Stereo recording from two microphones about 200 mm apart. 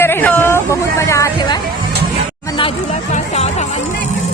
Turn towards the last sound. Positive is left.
turn(degrees=35)  # may be behind; listen again after turning